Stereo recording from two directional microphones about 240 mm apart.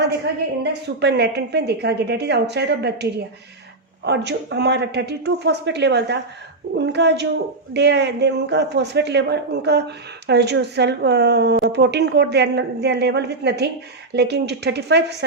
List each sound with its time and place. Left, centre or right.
0.6 s speech: right